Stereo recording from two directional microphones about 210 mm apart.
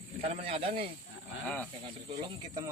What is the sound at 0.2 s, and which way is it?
Speech, 30° right (ahead or behind).